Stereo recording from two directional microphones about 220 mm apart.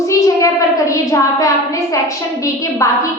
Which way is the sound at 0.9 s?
15° left (ahead or behind).